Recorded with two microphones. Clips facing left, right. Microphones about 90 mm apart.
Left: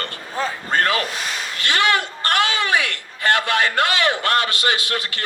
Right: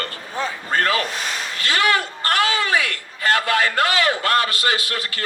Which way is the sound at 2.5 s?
20° left (ahead or behind).